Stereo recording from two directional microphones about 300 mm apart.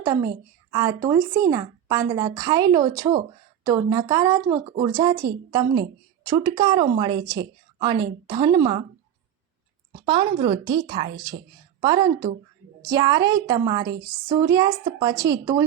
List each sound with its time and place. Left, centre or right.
0.0 s a woman's voice: centre
10.1 s speech: centre